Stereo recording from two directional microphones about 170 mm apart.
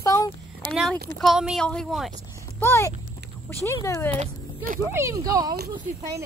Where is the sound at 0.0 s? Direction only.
20° left (ahead or behind).